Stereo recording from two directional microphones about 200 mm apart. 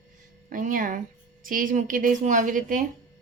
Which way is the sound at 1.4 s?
45° right (ahead or behind).